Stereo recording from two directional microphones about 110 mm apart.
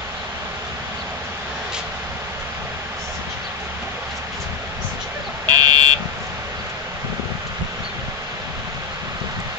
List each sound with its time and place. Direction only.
5.5 s buzzer: 40° right (ahead or behind)